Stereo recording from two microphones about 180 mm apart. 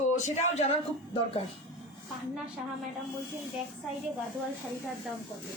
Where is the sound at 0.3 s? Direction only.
40° left (ahead or behind).